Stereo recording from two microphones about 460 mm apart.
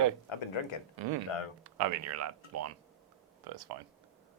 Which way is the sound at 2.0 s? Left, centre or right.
Right.